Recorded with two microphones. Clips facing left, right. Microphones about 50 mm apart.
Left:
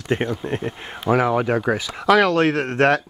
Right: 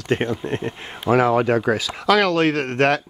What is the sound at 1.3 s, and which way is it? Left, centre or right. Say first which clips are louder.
Speech: right 2 dB; centre.